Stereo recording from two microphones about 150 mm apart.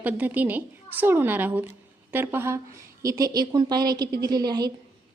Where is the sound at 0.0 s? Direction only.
10° right (ahead or behind).